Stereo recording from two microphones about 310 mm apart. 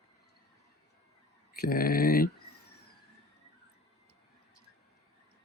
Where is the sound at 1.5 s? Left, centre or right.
Left.